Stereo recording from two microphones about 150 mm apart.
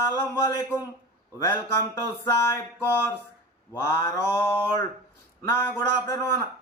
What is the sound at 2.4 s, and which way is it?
A man's voice, 15° left (ahead or behind).